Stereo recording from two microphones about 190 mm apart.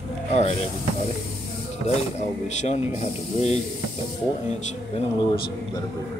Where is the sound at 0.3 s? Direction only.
35° left (ahead or behind).